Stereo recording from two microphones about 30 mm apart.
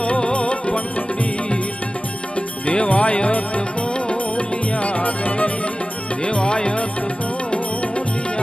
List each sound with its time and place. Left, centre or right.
0.3 s music: left
2.6 s jingle bell: left
4.1 s music: left
6.2 s music: left